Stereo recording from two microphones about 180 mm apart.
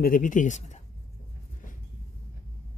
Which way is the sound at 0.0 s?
50° left (ahead or behind).